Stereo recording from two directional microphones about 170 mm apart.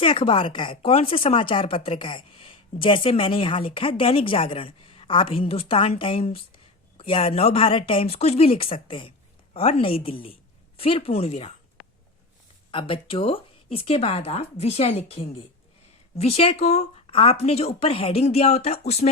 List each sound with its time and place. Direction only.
0.0 s speech: 30° left (ahead or behind)
12.7 s speech: 30° left (ahead or behind)